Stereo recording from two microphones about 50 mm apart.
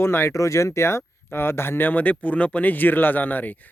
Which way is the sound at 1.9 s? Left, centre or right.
Left.